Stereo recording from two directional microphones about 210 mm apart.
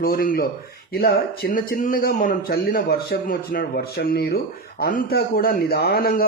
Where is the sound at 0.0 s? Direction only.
45° left (ahead or behind).